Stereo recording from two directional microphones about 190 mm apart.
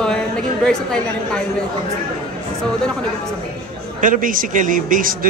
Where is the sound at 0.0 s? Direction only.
5° left (ahead or behind).